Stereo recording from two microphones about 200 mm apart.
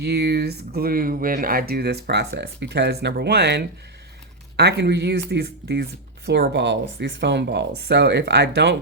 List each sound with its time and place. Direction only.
0.0 s speech: 55° right (ahead or behind)